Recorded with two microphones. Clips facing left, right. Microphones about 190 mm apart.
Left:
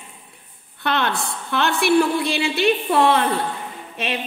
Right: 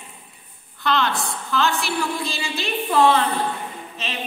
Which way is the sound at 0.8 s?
60° left (ahead or behind).